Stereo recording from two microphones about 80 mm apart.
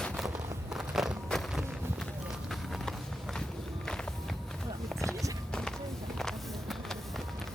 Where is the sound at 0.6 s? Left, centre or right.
Centre.